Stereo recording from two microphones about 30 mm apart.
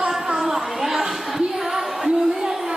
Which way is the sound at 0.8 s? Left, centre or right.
Centre.